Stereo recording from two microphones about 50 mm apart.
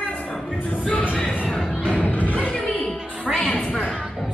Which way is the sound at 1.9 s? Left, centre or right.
Left.